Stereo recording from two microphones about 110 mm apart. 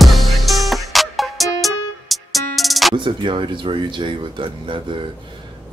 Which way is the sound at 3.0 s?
45° right (ahead or behind).